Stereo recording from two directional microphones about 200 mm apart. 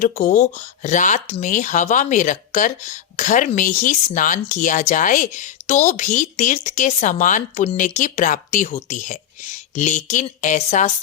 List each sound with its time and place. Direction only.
0.0 s speech: 40° left (ahead or behind)